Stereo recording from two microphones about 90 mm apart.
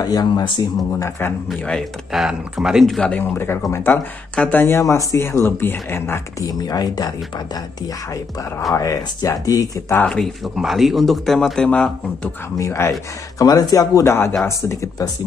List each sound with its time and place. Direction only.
0.0 s speech: 45° left (ahead or behind)
1.6 s speech: 10° left (ahead or behind)
2.1 s speech: 5° right (ahead or behind)
3.0 s speech: 20° left (ahead or behind)
6.4 s speech: 45° left (ahead or behind)
8.1 s speech: 35° left (ahead or behind)
9.9 s speech: 10° left (ahead or behind)
12.5 s speech: 35° left (ahead or behind)
13.4 s speech: 45° left (ahead or behind)